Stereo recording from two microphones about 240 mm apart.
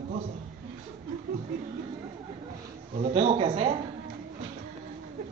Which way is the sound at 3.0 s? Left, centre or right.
Right.